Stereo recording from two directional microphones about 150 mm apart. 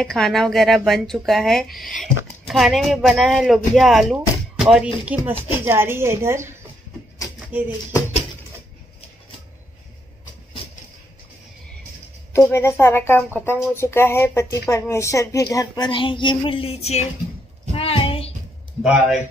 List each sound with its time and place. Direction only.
0.0 s speech: centre (ahead or behind)
12.3 s speech: 15° left (ahead or behind); by 17.0 s 40° left (ahead or behind)
17.7 s child singing: 40° left (ahead or behind)
18.8 s a man's voice: 5° right (ahead or behind)